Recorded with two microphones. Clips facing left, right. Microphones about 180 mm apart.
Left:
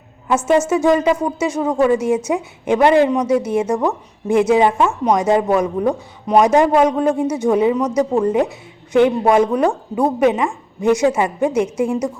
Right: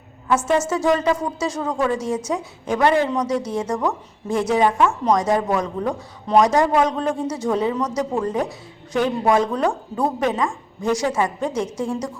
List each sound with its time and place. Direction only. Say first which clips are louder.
0.3 s a woman's voice: left 4 dB; 20° left (ahead or behind)
7.8 s speech: left 6 dB; centre (ahead or behind)
8.1 s a woman's voice: left 6 dB; 20° left (ahead or behind)